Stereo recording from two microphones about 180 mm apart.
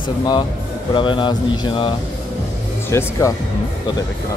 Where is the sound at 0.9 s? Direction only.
25° left (ahead or behind).